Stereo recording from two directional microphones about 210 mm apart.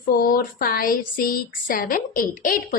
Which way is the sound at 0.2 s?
45° left (ahead or behind).